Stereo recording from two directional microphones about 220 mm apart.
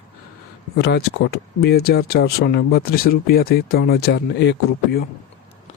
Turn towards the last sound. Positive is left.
turn(degrees=50)  # may be behind; listen again after turning